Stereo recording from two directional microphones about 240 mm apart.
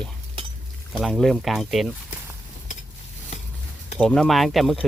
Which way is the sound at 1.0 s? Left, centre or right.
Centre.